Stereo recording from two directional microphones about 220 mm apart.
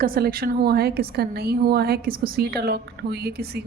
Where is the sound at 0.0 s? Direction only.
40° right (ahead or behind).